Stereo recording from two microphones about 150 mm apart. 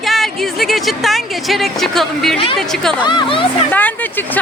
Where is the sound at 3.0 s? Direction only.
30° left (ahead or behind).